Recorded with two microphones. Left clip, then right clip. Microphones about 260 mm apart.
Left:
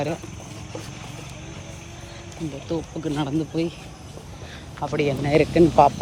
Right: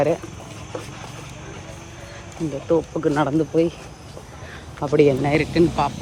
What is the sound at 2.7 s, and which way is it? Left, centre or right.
Speech, right.